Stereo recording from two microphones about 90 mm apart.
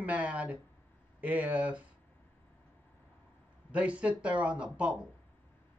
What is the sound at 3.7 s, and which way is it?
A man's voice, 15° right (ahead or behind).